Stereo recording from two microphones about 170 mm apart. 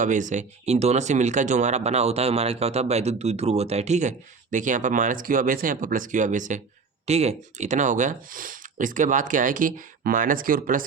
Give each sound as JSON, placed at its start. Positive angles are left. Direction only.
{"t": 0.0, "sound": "speech", "side_deg": -45}